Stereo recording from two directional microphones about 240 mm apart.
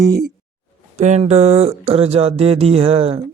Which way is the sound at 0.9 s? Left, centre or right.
Right.